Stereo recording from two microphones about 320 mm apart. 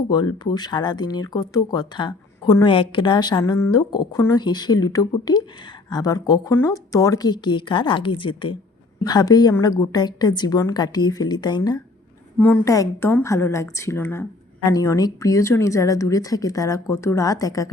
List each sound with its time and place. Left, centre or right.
0.1 s speech: centre